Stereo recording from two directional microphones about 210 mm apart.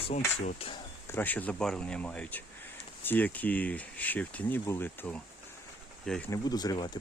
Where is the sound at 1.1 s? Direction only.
10° left (ahead or behind).